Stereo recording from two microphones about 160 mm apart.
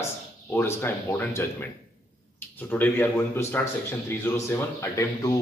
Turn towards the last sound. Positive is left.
turn(degrees=15)  # may be behind; listen again after turning